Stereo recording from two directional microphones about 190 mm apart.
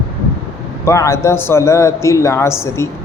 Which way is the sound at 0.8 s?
15° left (ahead or behind).